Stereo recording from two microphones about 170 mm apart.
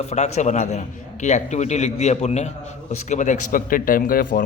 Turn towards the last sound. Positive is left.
turn(degrees=55)  # may be behind; listen again after turning